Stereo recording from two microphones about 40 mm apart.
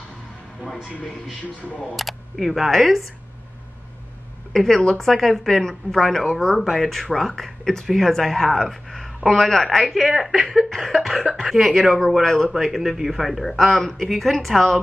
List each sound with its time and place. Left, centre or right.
2.0 s a woman's voice: centre
4.5 s a woman's voice: centre
12.2 s a man's voice: centre
12.4 s a woman's voice: centre
13.5 s a woman's voice: centre